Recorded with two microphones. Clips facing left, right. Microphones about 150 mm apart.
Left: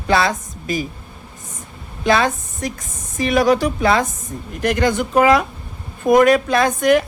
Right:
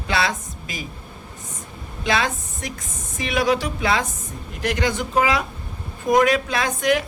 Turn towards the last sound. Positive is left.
turn(degrees=50)  # may be behind; listen again after turning